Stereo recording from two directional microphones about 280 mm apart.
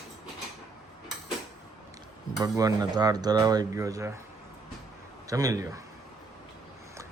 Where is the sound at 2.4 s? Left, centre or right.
Centre.